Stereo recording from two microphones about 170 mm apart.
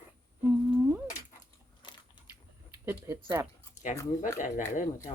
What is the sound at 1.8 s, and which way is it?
Biting, 30° left (ahead or behind).